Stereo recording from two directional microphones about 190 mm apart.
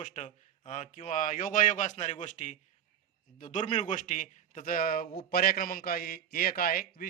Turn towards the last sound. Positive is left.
turn(degrees=50)  # may be behind; listen again after turning